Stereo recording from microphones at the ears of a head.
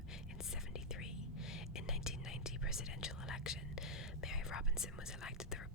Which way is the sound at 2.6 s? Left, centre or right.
Left.